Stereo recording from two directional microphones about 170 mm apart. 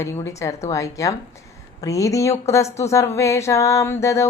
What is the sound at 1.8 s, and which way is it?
Speech, 20° left (ahead or behind).